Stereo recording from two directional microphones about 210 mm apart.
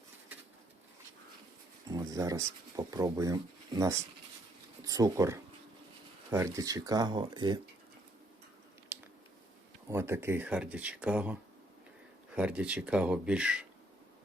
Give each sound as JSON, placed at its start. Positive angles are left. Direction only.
{"t": 1.9, "sound": "speech", "side_deg": -15}
{"t": 9.9, "sound": "speech", "side_deg": -10}